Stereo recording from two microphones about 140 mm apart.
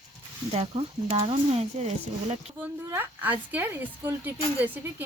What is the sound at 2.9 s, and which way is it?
A woman's voice, 15° right (ahead or behind).